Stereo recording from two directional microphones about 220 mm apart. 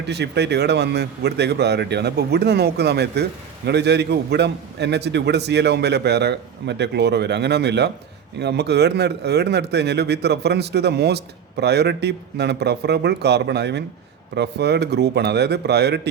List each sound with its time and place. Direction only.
0.0 s speech: 50° right (ahead or behind)